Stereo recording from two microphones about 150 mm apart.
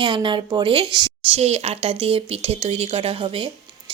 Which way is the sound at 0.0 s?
35° right (ahead or behind).